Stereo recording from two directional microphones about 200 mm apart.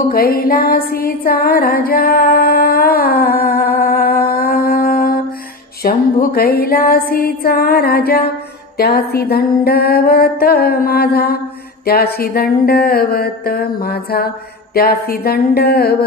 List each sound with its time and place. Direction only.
0.1 s music: 50° left (ahead or behind)
5.9 s mantra: 50° left (ahead or behind)